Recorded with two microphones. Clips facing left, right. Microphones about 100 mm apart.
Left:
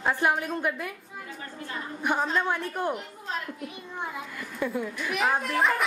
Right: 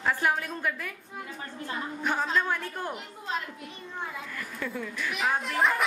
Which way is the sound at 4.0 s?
15° left (ahead or behind).